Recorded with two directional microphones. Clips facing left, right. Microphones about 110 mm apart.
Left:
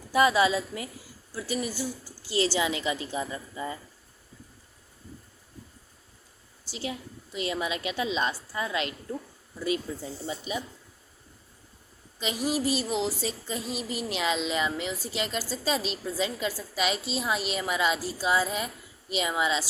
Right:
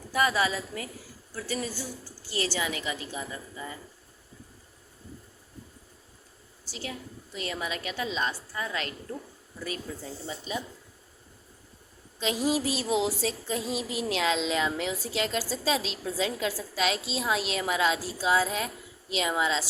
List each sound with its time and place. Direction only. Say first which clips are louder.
0.1 s a woman's voice: left 4 dB; 20° left (ahead or behind)
6.7 s a woman's voice: left 3 dB; 20° left (ahead or behind)
12.2 s a sound: right 1 dB; centre (ahead or behind)